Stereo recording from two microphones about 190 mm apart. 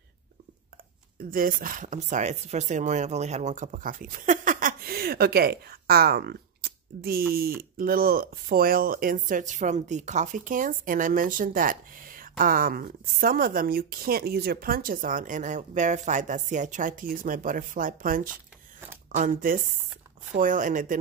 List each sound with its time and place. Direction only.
1.3 s speech: 50° right (ahead or behind)